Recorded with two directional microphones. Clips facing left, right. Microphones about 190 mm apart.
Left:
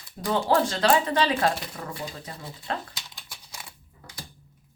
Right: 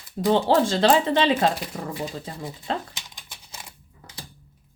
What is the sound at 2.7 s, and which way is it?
Typing, 20° right (ahead or behind).